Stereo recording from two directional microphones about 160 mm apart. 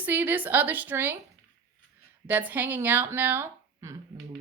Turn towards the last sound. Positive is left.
turn(degrees=-15)  # may be behind; listen again after turning